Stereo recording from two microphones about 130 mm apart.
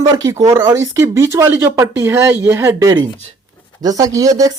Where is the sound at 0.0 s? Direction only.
30° right (ahead or behind).